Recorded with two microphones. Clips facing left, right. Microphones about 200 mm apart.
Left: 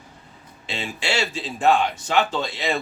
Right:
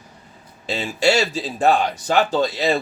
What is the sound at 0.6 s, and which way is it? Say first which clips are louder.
Speech: right 9 dB; 40° right (ahead or behind).